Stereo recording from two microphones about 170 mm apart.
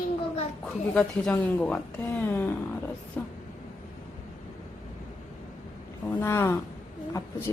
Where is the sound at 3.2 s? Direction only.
10° left (ahead or behind).